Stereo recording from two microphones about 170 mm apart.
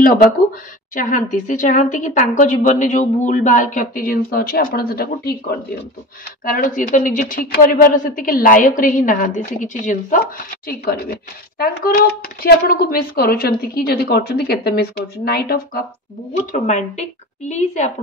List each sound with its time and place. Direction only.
0.9 s a woman's voice: 50° left (ahead or behind)
16.5 s a woman's voice: 45° left (ahead or behind)